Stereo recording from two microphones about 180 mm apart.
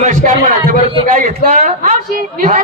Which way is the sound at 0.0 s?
40° right (ahead or behind).